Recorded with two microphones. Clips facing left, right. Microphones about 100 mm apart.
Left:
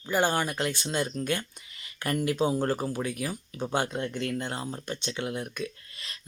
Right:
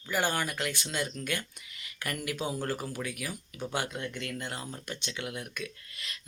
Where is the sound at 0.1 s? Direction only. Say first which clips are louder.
Left 4 dB; 25° left (ahead or behind).